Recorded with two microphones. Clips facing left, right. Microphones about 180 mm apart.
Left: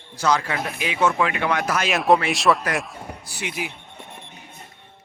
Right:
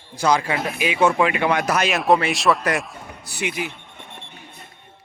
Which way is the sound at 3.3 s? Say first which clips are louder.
Right 4 dB; 70° right (ahead or behind).